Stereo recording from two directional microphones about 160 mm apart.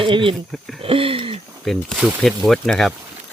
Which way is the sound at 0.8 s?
35° right (ahead or behind).